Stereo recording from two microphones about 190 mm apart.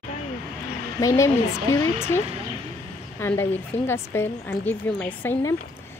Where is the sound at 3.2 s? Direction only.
10° left (ahead or behind).